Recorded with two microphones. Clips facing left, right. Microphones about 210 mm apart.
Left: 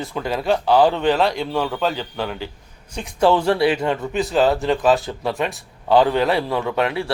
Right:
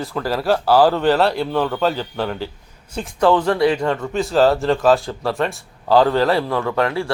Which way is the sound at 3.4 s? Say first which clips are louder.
Right 1 dB; 25° left (ahead or behind).